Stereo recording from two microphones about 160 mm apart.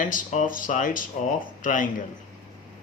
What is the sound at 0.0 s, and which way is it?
Speech, 55° left (ahead or behind).